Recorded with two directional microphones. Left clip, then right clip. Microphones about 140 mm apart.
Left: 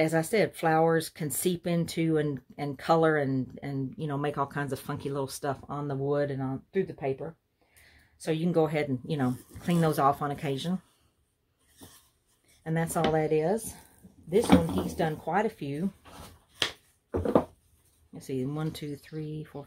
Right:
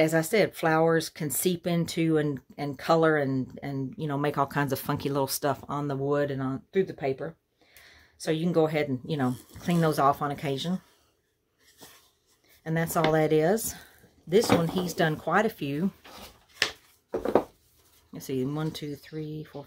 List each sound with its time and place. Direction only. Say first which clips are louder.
0.0 s speech: right 2 dB; 15° right (ahead or behind)
4.2 s speech: right 4 dB; 30° right (ahead or behind)
7.8 s speech: right 3 dB; 5° right (ahead or behind)
12.6 s speech: right 3 dB; 10° right (ahead or behind)
13.0 s speech: right 3 dB; 30° right (ahead or behind)
13.3 s speech: right 3 dB; 45° right (ahead or behind)
18.1 s speech: right 3 dB; 25° right (ahead or behind)
18.5 s speech: right 2 dB; 10° right (ahead or behind)